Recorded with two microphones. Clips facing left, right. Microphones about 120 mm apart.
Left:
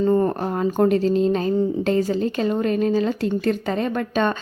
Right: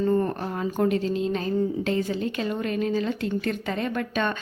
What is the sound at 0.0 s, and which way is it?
Speech, 35° left (ahead or behind).